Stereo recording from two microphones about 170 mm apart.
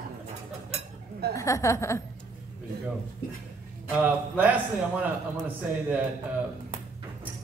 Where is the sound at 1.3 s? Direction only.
20° left (ahead or behind).